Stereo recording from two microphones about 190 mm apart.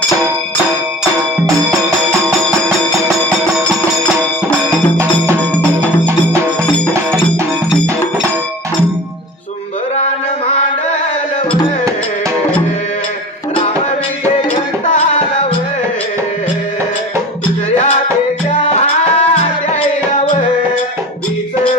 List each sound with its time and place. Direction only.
4.4 s music: 15° right (ahead or behind)
10.0 s mantra: 30° left (ahead or behind)
14.5 s music: 35° left (ahead or behind)
18.6 s music: 35° left (ahead or behind)